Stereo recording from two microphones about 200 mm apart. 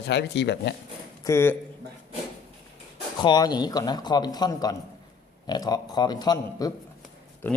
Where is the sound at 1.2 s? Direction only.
10° left (ahead or behind).